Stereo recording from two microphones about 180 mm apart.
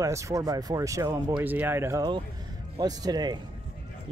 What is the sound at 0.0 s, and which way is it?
A man's voice, 15° right (ahead or behind).